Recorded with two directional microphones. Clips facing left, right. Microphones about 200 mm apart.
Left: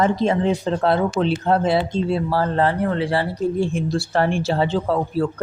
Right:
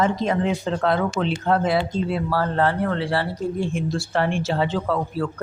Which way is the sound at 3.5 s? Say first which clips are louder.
Left 3 dB; 35° left (ahead or behind).